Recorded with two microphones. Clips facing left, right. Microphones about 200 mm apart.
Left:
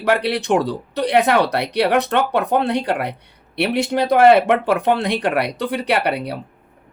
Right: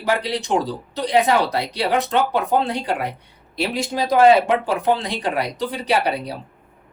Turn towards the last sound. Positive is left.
turn(degrees=65)  # may be behind; listen again after turning